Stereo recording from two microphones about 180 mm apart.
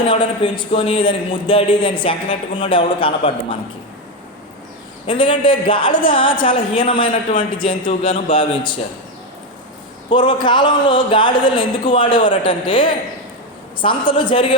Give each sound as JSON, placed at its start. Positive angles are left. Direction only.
{"t": 0.1, "sound": "a man's voice", "side_deg": 25}
{"t": 5.0, "sound": "a man's voice", "side_deg": 25}
{"t": 10.1, "sound": "a man's voice", "side_deg": 25}